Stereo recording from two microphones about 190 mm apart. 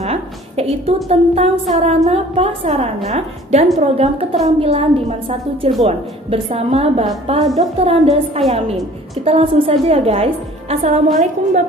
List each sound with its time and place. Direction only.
0.0 s a sound: 35° right (ahead or behind)
1.0 s a woman's voice: 35° right (ahead or behind)
6.3 s a woman's voice: 30° right (ahead or behind)